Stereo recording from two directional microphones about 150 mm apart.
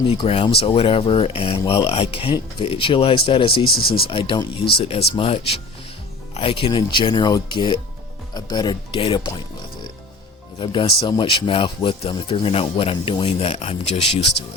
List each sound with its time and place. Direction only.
0.1 s speech: 40° left (ahead or behind)
10.6 s speech: 35° left (ahead or behind)